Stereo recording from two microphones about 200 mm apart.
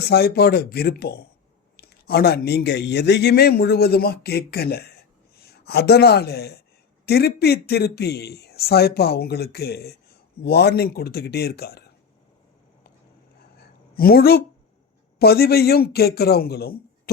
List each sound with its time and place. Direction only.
0.1 s a man's voice: 55° left (ahead or behind)
13.6 s a sound: 50° left (ahead or behind)
15.2 s a man's voice: 50° left (ahead or behind)